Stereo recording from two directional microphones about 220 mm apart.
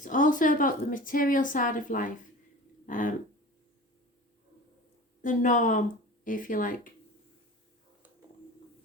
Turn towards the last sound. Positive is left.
turn(degrees=40)  # may be behind; listen again after turning